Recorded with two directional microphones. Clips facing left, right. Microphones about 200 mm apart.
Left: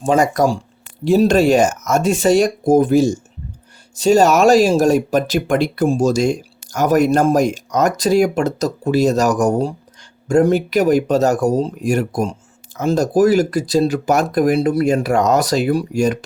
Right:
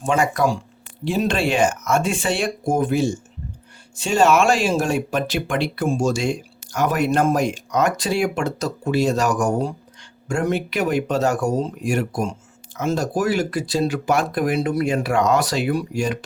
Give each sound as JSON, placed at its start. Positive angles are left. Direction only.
{"t": 0.0, "sound": "speech", "side_deg": 35}